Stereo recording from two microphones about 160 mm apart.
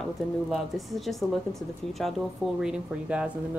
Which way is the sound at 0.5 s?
Centre (ahead or behind).